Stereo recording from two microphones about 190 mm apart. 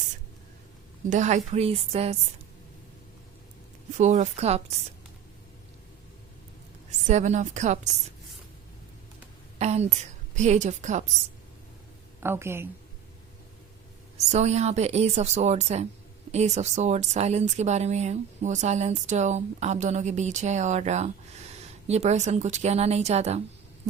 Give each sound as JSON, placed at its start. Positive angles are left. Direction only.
{"t": 1.1, "sound": "speech", "side_deg": -40}
{"t": 3.9, "sound": "speech", "side_deg": -40}
{"t": 7.1, "sound": "speech", "side_deg": -40}
{"t": 9.6, "sound": "a woman's voice", "side_deg": -35}
{"t": 12.2, "sound": "speech", "side_deg": -10}
{"t": 14.2, "sound": "speech", "side_deg": -35}